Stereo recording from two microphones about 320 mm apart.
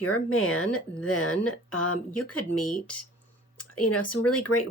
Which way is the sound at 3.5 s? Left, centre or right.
Left.